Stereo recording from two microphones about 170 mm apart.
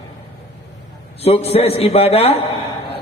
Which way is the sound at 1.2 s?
35° left (ahead or behind).